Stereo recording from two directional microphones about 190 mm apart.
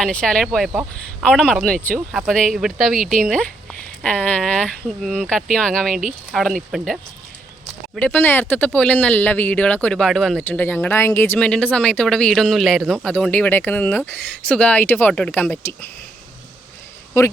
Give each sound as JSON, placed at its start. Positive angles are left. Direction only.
{"t": 0.0, "sound": "speech", "side_deg": 5}
{"t": 3.0, "sound": "speech", "side_deg": -45}
{"t": 3.2, "sound": "speech", "side_deg": 5}
{"t": 17.2, "sound": "speech", "side_deg": 15}